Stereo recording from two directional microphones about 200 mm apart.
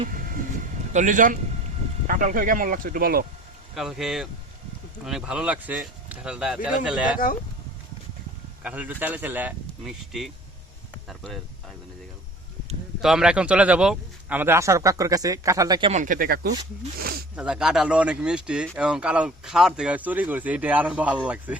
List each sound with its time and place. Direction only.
0.9 s a man's voice: 40° right (ahead or behind)
3.8 s speech: centre (ahead or behind)
8.6 s speech: 10° right (ahead or behind)
13.0 s speech: 5° right (ahead or behind); by 15.9 s 20° right (ahead or behind)
15.9 s speech: 40° right (ahead or behind)
17.3 s speech: 5° right (ahead or behind)